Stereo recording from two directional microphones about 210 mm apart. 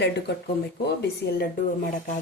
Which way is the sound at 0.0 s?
50° left (ahead or behind).